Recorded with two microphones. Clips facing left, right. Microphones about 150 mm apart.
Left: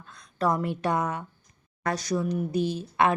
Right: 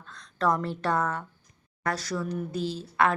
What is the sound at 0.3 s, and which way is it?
Speech, 10° left (ahead or behind).